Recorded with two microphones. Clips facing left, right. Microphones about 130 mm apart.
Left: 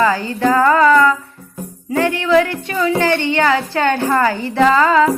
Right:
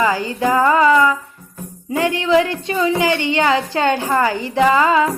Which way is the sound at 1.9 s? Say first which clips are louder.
Left 1 dB; 15° right (ahead or behind).